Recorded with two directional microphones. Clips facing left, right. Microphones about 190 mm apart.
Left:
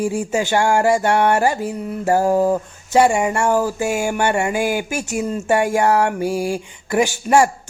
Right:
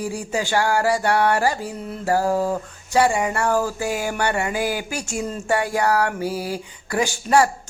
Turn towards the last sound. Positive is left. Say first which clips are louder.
# left 3 dB
turn(degrees=15)  # may be behind; listen again after turning